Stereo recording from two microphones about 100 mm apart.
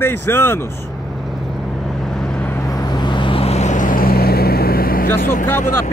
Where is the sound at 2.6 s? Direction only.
40° left (ahead or behind); by 3.6 s 80° left.